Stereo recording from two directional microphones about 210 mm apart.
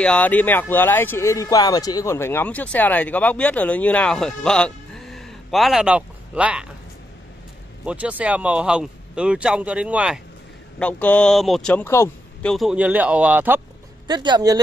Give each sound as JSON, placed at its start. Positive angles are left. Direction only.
{"t": 0.0, "sound": "speech", "side_deg": 5}
{"t": 7.8, "sound": "speech", "side_deg": -5}
{"t": 10.8, "sound": "speech", "side_deg": 5}
{"t": 14.0, "sound": "speech", "side_deg": -20}